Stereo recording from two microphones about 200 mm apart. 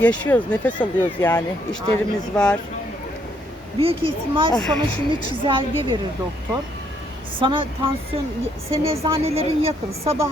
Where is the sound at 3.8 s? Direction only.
30° right (ahead or behind).